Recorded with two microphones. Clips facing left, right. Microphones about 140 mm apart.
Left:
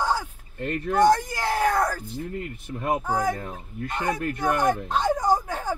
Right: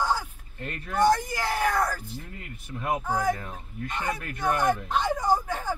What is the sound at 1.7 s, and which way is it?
Yell, 45° left (ahead or behind).